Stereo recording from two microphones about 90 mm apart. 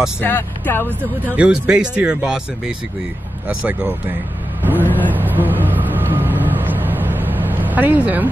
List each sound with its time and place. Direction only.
0.2 s speech: 25° left (ahead or behind)
1.3 s speech: 10° right (ahead or behind)
3.4 s speech: 15° right (ahead or behind)
4.8 s vehicle: 20° left (ahead or behind)
5.1 s vehicle: 20° right (ahead or behind)